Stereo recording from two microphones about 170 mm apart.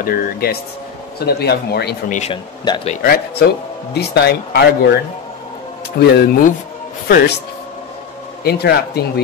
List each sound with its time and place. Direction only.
0.0 s speech: 60° left (ahead or behind)
2.6 s speech: 25° left (ahead or behind)
3.0 s speech: 65° left (ahead or behind)
3.9 s speech: 75° left (ahead or behind)
5.9 s speech: 70° left (ahead or behind)
8.5 s speech: 70° left (ahead or behind)